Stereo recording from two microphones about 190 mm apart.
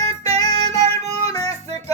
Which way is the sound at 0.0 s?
15° left (ahead or behind).